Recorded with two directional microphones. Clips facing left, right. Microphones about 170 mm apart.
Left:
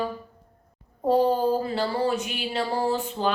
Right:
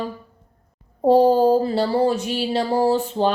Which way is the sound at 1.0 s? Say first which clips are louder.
Right 7 dB; 35° right (ahead or behind).